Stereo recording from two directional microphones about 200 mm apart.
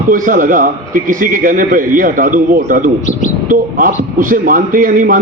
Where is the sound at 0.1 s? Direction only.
40° right (ahead or behind).